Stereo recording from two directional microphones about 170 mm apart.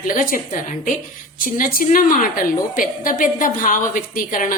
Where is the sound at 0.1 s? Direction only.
50° left (ahead or behind).